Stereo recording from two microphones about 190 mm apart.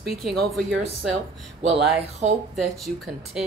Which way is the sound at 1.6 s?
30° right (ahead or behind).